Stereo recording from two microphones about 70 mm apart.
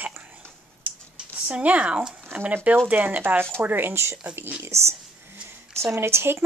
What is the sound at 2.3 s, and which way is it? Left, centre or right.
Speech, right.